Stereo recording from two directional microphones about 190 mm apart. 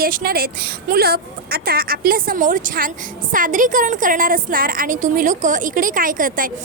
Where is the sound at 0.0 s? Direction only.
50° right (ahead or behind).